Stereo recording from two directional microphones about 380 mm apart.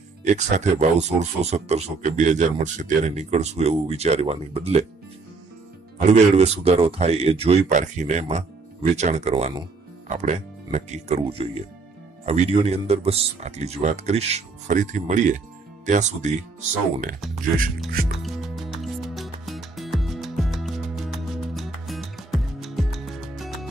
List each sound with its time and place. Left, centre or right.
0.2 s speech: centre
5.9 s speech: centre
18.1 s music: centre